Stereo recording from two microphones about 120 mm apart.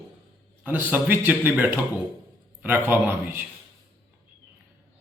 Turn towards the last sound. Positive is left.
turn(degrees=-15)  # may be behind; listen again after turning